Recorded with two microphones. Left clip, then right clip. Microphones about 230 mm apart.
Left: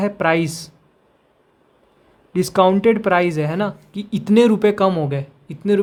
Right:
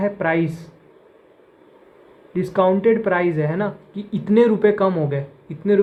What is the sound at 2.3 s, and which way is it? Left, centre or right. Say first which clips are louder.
Speech: left 3 dB; left.